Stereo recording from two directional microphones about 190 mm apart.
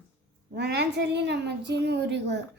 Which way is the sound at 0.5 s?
60° right (ahead or behind).